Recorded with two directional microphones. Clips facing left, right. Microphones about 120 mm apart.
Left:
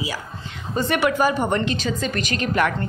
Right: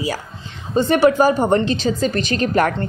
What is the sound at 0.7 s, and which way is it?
A woman's voice, 30° right (ahead or behind).